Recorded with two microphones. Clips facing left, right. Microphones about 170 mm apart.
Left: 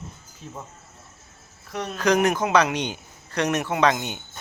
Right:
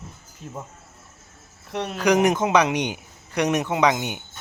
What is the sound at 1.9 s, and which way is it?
Speech, 15° right (ahead or behind).